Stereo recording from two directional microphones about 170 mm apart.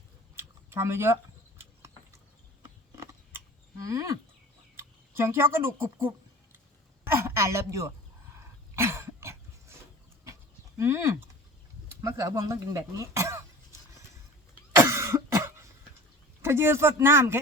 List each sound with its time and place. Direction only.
0.3 s a sound: 15° right (ahead or behind)
7.0 s a woman's voice: 15° right (ahead or behind)
8.7 s cough: 15° right (ahead or behind)
10.8 s speech: 15° right (ahead or behind)
14.8 s cough: 15° right (ahead or behind)
16.4 s speech: 15° right (ahead or behind)